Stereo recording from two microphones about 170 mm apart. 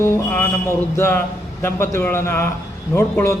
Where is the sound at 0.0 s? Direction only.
15° left (ahead or behind).